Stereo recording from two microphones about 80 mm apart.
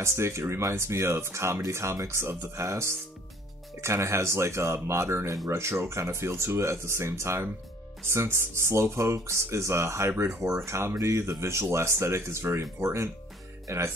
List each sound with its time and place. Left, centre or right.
0.0 s speech: right